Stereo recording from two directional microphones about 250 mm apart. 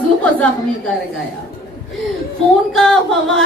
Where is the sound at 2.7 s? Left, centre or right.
Centre.